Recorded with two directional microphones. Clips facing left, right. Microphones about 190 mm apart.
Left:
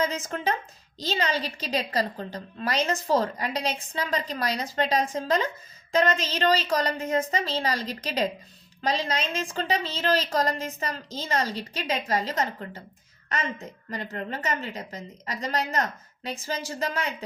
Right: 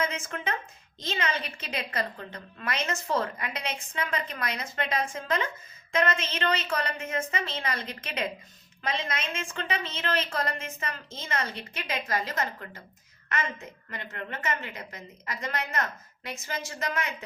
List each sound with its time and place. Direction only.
0.0 s a woman's voice: 35° left (ahead or behind)